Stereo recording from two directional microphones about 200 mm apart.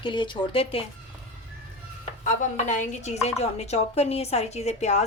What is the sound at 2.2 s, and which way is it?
Speech, 40° left (ahead or behind).